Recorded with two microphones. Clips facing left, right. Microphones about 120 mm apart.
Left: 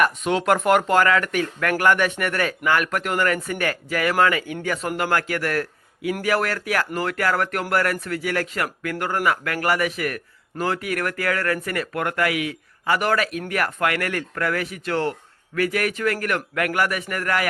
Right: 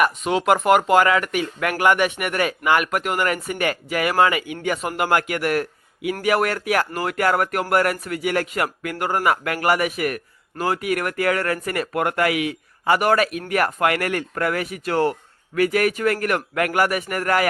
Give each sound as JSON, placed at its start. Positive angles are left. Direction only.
{"t": 0.0, "sound": "a man's voice", "side_deg": -5}